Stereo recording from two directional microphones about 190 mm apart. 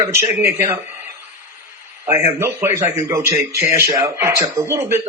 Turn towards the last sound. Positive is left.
turn(degrees=-15)  # may be behind; listen again after turning